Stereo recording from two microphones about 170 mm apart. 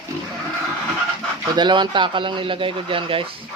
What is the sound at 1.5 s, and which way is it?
Speech, 25° right (ahead or behind).